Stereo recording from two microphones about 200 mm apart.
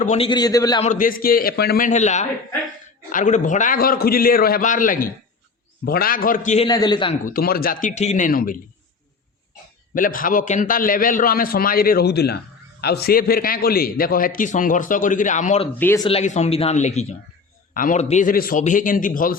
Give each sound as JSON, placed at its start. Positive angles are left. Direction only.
{"t": 0.0, "sound": "a man's voice", "side_deg": 35}
{"t": 0.3, "sound": "a man's voice", "side_deg": 20}
{"t": 0.8, "sound": "a man's voice", "side_deg": 40}
{"t": 1.9, "sound": "a man's voice", "side_deg": 35}
{"t": 6.7, "sound": "a man's voice", "side_deg": 20}
{"t": 7.3, "sound": "a man's voice", "side_deg": 45}
{"t": 9.9, "sound": "a man's voice", "side_deg": 45}